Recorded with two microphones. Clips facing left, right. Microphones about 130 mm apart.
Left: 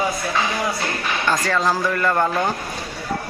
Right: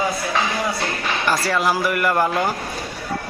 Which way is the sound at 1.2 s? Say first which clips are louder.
Even; 10° right (ahead or behind).